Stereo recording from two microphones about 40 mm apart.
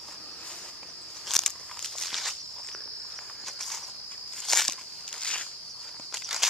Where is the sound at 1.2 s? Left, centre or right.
Centre.